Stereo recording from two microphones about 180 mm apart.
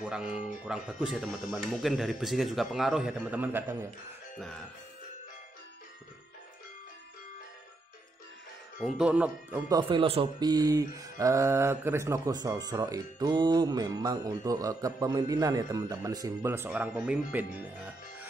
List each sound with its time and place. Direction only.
0.0 s speech: 5° right (ahead or behind)
4.4 s speech: 5° left (ahead or behind)
8.8 s speech: 5° right (ahead or behind)
9.7 s speech: 25° right (ahead or behind)